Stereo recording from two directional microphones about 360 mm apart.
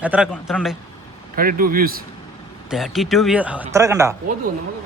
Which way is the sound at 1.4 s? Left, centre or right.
Right.